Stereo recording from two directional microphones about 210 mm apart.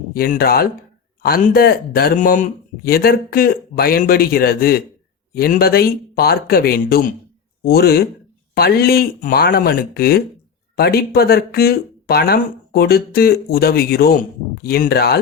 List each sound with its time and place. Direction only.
0.1 s speech: 45° left (ahead or behind)